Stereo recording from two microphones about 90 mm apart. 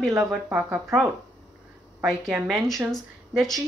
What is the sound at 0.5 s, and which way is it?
Speech, 15° right (ahead or behind).